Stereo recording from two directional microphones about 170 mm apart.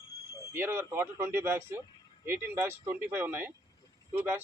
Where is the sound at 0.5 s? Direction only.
15° right (ahead or behind).